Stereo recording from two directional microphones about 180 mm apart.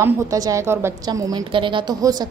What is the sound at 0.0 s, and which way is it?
A woman's voice, 20° right (ahead or behind).